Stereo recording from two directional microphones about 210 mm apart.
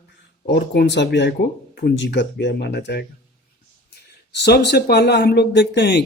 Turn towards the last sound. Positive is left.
turn(degrees=55)  # may be behind; listen again after turning